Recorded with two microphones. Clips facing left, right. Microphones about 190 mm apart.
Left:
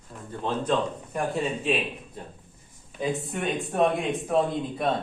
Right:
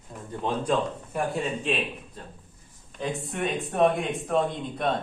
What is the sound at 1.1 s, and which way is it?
Speech, centre (ahead or behind).